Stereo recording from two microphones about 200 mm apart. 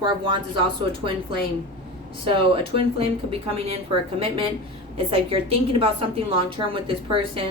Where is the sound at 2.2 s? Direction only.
25° right (ahead or behind).